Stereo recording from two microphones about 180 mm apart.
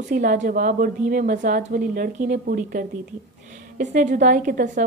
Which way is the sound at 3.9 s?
45° right (ahead or behind).